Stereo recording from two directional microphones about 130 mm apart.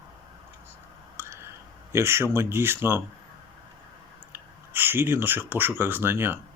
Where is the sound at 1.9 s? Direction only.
20° right (ahead or behind).